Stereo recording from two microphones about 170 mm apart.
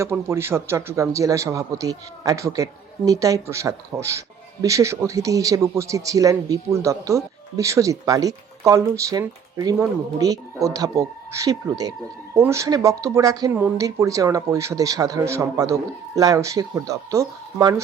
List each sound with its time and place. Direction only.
0.0 s a man's voice: 15° right (ahead or behind)